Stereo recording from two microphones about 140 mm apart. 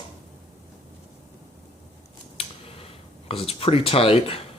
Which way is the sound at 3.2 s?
45° left (ahead or behind).